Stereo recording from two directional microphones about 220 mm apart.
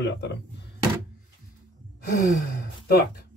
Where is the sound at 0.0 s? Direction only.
50° left (ahead or behind).